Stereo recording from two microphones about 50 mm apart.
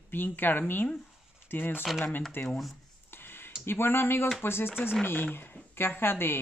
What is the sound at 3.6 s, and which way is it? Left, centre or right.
Speech, left.